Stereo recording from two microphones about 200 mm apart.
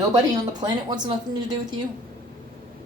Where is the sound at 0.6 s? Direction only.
20° right (ahead or behind).